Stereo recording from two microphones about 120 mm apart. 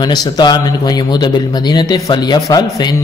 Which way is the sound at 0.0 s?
35° left (ahead or behind).